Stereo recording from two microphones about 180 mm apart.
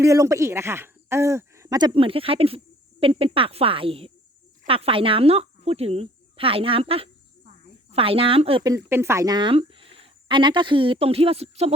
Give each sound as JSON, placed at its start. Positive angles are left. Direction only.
{"t": 0.0, "sound": "a woman's voice", "side_deg": -15}
{"t": 8.6, "sound": "speech", "side_deg": -15}